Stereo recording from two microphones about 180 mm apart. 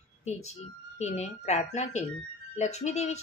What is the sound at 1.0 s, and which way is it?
A woman's voice, 40° left (ahead or behind).